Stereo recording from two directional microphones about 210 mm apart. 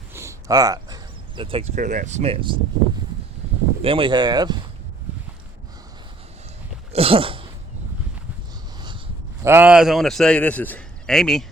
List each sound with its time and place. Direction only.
0.1 s speech: 15° right (ahead or behind)
3.8 s speech: 25° right (ahead or behind)
6.9 s a sound: 25° right (ahead or behind)
9.4 s a man's voice: 10° right (ahead or behind)